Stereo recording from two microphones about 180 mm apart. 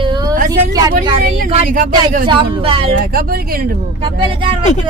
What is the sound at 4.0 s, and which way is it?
Speech, 30° right (ahead or behind).